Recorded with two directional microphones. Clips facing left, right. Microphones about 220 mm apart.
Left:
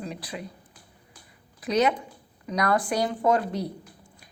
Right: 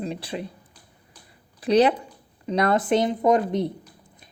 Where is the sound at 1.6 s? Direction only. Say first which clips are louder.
Right 5 dB; 30° right (ahead or behind).